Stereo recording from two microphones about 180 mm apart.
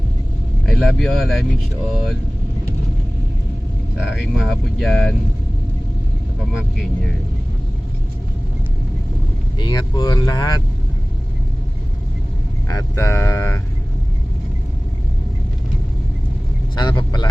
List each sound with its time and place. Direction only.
0.6 s speech: 5° left (ahead or behind)
3.9 s speech: 5° right (ahead or behind)
6.5 s speech: centre (ahead or behind)
9.6 s speech: 25° left (ahead or behind)
12.6 s speech: 15° left (ahead or behind)
16.7 s speech: 25° left (ahead or behind)